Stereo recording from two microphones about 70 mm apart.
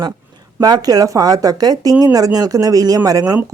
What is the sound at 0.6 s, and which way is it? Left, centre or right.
Speech, right.